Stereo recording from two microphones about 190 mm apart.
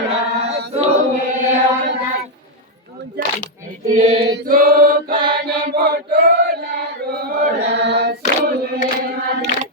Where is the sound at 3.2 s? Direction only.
60° right (ahead or behind).